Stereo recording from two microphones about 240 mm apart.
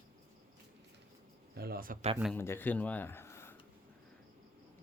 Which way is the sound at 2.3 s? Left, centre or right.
Centre.